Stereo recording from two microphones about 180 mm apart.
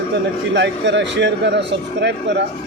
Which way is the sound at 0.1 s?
80° right.